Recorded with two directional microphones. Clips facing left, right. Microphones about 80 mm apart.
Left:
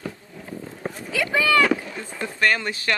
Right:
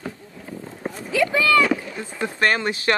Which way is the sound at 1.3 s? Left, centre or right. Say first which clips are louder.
Even; left.